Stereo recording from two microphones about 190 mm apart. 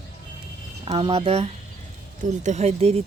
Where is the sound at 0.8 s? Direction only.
30° right (ahead or behind).